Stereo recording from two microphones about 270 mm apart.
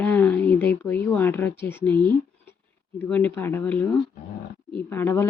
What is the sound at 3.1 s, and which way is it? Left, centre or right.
Speech, centre.